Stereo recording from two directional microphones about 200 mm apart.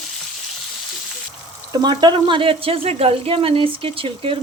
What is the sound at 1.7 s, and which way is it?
Speech, 20° right (ahead or behind).